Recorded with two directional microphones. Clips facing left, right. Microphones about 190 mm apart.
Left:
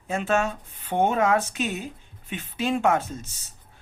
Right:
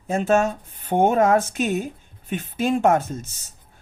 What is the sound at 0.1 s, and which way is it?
Speech, 45° right (ahead or behind).